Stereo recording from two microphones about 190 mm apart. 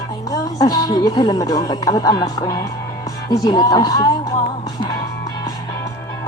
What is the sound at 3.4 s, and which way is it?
Music, 20° left (ahead or behind).